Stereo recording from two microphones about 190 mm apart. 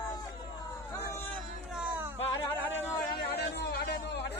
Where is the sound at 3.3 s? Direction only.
60° left (ahead or behind).